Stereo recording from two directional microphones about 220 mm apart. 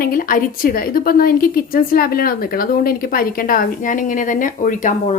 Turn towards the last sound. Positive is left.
turn(degrees=35)  # may be behind; listen again after turning